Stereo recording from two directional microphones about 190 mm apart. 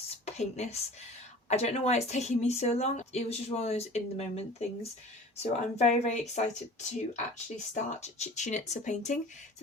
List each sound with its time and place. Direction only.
0.3 s a woman's voice: 35° left (ahead or behind)
7.7 s a woman's voice: 35° left (ahead or behind)